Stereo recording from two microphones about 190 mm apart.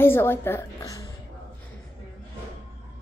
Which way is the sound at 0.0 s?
10° left (ahead or behind).